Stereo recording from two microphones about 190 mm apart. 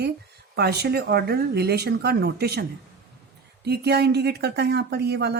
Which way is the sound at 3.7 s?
60° right (ahead or behind).